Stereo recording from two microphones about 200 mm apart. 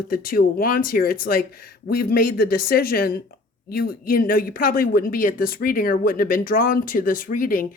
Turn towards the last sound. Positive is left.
turn(degrees=45)  # may be behind; listen again after turning